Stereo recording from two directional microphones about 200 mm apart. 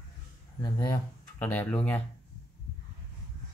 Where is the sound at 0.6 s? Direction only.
15° left (ahead or behind).